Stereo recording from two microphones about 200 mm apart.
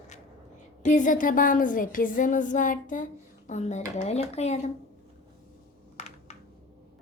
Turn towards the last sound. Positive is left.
turn(degrees=30)  # may be behind; listen again after turning